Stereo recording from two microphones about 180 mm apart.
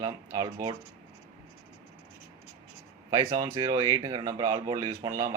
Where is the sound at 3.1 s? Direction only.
20° right (ahead or behind).